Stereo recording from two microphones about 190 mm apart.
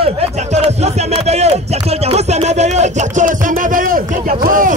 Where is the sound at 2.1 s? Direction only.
35° right (ahead or behind).